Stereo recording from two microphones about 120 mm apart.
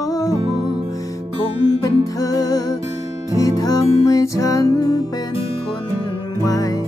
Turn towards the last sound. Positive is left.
turn(degrees=30)  # may be behind; listen again after turning